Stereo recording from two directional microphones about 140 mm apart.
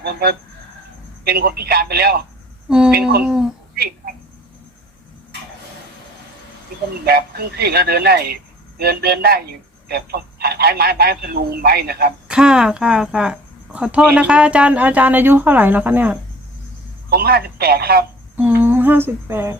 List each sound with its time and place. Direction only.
1.2 s speech: 90° right
2.6 s speech: 5° right (ahead or behind)
3.8 s a sound: 90° right
7.0 s speech: 90° right
12.3 s a woman's voice: 5° right (ahead or behind)
17.2 s speech: 90° right
18.6 s speech: 15° right (ahead or behind)